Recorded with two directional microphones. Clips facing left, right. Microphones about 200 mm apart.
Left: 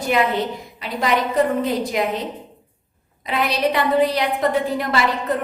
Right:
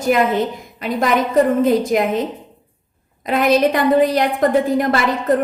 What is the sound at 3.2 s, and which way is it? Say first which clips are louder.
A woman's voice: right 6 dB; 45° right (ahead or behind).